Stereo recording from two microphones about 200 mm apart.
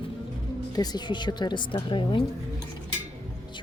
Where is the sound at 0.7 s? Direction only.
20° left (ahead or behind).